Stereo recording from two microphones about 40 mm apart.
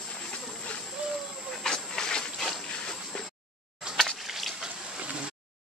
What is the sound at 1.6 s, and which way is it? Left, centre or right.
Dog, centre.